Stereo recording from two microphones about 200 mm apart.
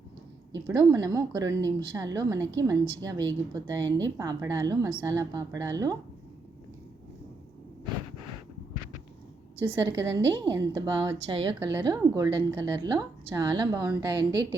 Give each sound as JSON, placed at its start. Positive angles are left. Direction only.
{"t": 0.7, "sound": "a woman's voice", "side_deg": -15}
{"t": 9.7, "sound": "a woman's voice", "side_deg": -15}